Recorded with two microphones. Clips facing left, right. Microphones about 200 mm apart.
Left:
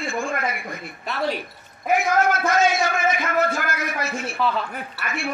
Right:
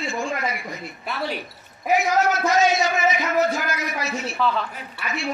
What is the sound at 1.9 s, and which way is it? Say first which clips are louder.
A man's voice: even; 50° left (ahead or behind).